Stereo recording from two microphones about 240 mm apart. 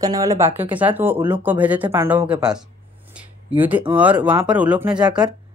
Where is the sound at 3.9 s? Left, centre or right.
Centre.